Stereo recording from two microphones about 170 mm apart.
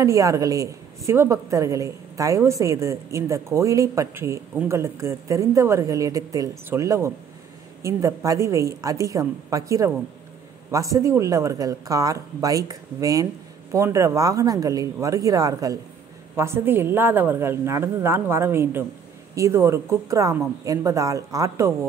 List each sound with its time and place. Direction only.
0.0 s a woman's voice: 20° right (ahead or behind)